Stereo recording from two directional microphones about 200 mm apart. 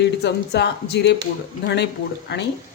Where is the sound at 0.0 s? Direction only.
60° left (ahead or behind).